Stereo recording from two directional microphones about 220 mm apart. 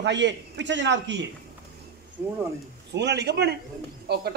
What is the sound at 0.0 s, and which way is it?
A man's voice, 55° right (ahead or behind).